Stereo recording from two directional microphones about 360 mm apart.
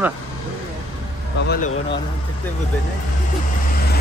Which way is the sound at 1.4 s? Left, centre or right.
Left.